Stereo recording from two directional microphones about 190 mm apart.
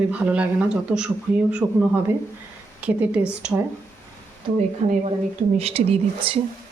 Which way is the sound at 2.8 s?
5° right (ahead or behind).